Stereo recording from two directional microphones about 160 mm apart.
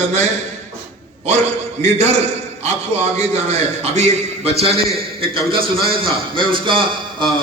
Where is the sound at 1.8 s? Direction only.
40° right (ahead or behind).